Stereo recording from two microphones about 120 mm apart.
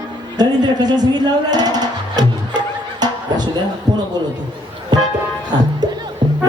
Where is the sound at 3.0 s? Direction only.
35° right (ahead or behind).